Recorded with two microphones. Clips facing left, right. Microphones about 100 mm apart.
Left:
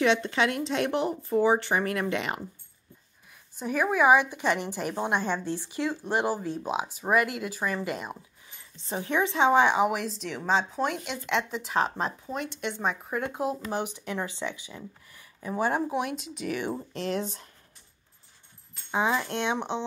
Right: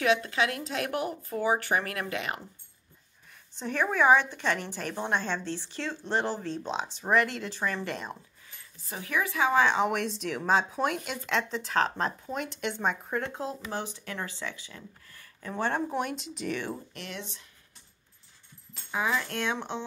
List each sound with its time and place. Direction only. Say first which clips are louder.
0.0 s a woman's voice: left 2 dB; 30° left (ahead or behind)
3.5 s a woman's voice: left 2 dB; 10° left (ahead or behind)
8.7 s a woman's voice: left 4 dB; 25° left (ahead or behind)
9.8 s a woman's voice: left 2 dB; 5° left (ahead or behind)
16.9 s speech: left 10 dB; 35° left (ahead or behind)
18.9 s a woman's voice: left 3 dB; 25° left (ahead or behind)